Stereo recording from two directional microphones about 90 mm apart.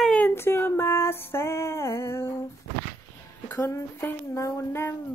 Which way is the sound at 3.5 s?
30° left (ahead or behind).